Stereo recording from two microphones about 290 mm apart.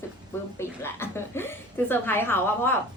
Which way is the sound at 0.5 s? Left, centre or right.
Centre.